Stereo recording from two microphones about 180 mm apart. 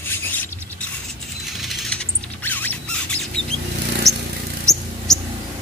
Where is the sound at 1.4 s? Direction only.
Centre (ahead or behind).